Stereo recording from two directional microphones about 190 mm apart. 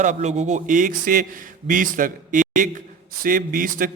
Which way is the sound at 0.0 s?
40° right (ahead or behind).